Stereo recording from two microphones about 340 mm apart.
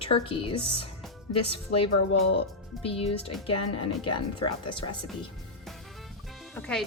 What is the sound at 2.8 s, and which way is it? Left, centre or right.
A woman's voice, centre.